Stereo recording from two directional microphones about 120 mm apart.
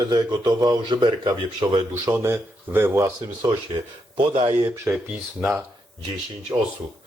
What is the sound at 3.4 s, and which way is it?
A man's voice, 40° right (ahead or behind).